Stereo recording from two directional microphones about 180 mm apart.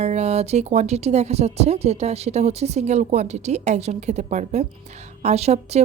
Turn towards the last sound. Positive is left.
turn(degrees=-35)  # may be behind; listen again after turning